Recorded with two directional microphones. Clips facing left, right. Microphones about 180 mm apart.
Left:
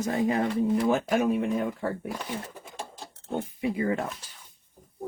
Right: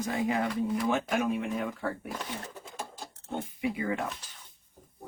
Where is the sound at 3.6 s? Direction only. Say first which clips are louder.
Left 4 dB; 40° left (ahead or behind).